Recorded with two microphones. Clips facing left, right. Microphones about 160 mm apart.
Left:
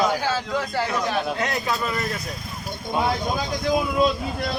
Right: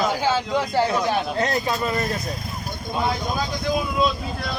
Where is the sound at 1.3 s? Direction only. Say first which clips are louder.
Right 3 dB; 35° right (ahead or behind).